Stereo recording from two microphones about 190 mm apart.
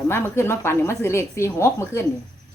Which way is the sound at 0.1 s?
15° left (ahead or behind).